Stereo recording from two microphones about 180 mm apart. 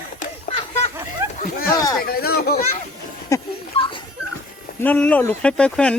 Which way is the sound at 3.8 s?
30° left (ahead or behind).